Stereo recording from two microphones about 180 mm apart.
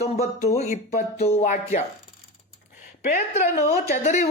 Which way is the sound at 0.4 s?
40° left (ahead or behind).